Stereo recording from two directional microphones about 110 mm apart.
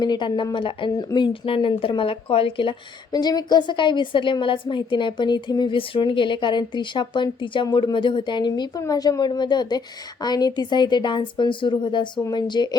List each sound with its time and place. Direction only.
0.0 s a woman's voice: 40° left (ahead or behind)
3.1 s a woman's voice: 40° left (ahead or behind)